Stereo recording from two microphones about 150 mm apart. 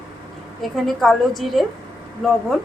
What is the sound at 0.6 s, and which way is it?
Speech, centre (ahead or behind).